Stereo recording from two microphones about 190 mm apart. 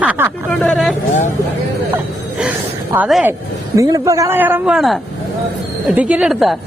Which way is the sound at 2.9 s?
5° right (ahead or behind).